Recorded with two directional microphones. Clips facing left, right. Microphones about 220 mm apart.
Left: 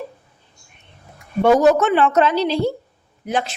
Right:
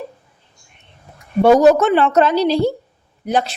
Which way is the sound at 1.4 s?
35° right (ahead or behind).